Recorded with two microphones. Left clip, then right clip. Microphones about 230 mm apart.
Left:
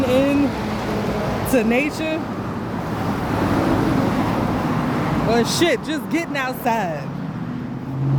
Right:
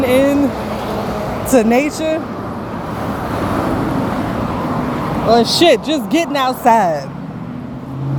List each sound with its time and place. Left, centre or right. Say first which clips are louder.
0.0 s a sound: right 5 dB; right
1.5 s speech: right 7 dB; centre
5.3 s speech: right 9 dB; centre